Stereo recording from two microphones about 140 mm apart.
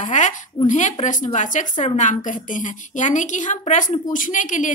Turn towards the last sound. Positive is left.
turn(degrees=65)  # may be behind; listen again after turning